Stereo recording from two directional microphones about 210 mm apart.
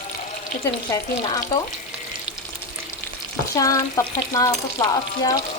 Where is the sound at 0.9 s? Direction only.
15° left (ahead or behind).